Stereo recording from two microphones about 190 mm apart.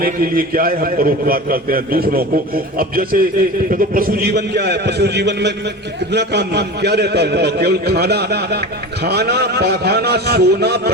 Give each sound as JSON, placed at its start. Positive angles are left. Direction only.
{"t": 0.0, "sound": "a man's voice", "side_deg": -50}